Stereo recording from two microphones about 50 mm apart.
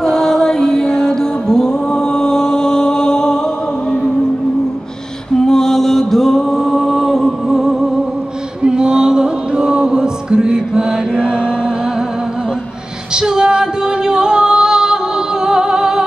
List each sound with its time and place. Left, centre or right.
0.0 s music: centre
5.4 s music: centre
13.1 s music: centre